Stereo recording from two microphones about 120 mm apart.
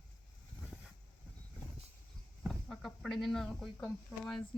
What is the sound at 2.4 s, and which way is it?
Speech, centre (ahead or behind).